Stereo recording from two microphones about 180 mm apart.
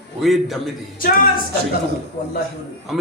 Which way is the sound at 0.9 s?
55° left (ahead or behind).